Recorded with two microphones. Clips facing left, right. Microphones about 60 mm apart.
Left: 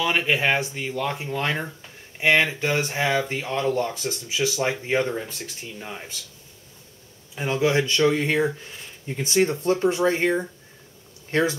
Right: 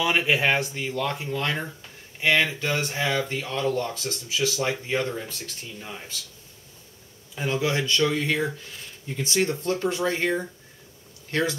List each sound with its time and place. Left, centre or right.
0.0 s speech: centre
7.3 s speech: centre